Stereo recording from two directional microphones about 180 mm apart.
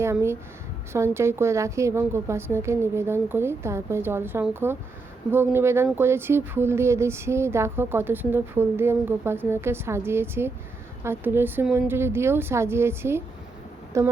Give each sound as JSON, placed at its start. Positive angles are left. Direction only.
{"t": 0.0, "sound": "a woman's voice", "side_deg": -15}